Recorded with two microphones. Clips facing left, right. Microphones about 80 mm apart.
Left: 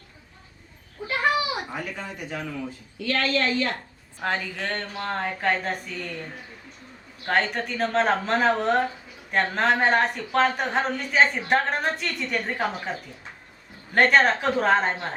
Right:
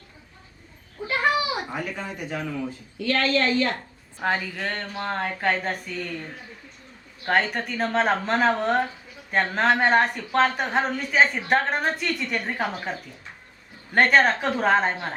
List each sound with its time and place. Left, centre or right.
1.7 s a woman's voice: right
4.2 s a woman's voice: centre
7.3 s a woman's voice: centre